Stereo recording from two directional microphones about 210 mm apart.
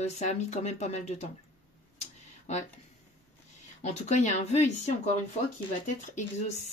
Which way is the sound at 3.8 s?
35° left (ahead or behind).